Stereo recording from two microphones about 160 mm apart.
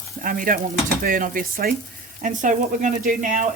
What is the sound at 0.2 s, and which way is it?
Speech, 60° right (ahead or behind).